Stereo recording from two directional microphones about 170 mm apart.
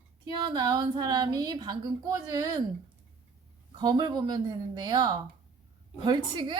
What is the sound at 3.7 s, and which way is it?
A woman's voice, 25° right (ahead or behind).